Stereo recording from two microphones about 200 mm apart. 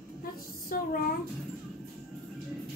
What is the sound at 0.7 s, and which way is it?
Speech, 45° left (ahead or behind).